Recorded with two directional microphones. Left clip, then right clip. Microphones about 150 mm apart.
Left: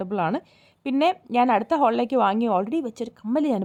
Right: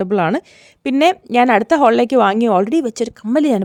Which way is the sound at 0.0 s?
50° right (ahead or behind).